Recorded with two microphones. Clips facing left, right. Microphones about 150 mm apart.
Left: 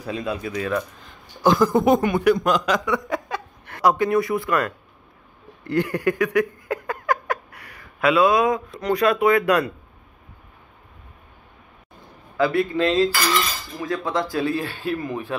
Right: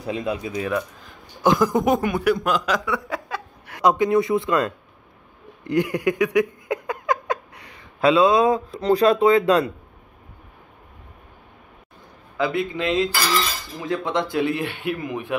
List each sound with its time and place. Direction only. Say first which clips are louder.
0.0 s speech: right 1 dB; 20° right (ahead or behind)
1.9 s speech: left 2 dB; centre (ahead or behind)
3.1 s laughter: left 2 dB; 5° right (ahead or behind)
3.8 s speech: right 1 dB; 20° right (ahead or behind)
5.6 s a sound: right 1 dB; 15° right (ahead or behind)
8.8 s speech: right 2 dB; 30° right (ahead or behind)
12.4 s speech: left 3 dB; 15° right (ahead or behind)